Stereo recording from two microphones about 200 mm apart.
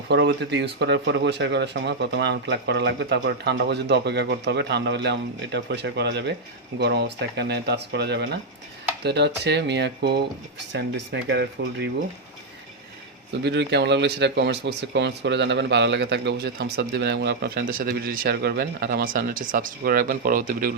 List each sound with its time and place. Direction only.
0.1 s speech: 60° right (ahead or behind)
13.4 s speech: 60° right (ahead or behind); by 20.7 s 45° right (ahead or behind)